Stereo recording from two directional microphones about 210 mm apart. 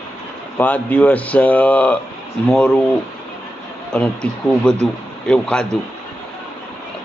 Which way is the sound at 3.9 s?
5° left (ahead or behind).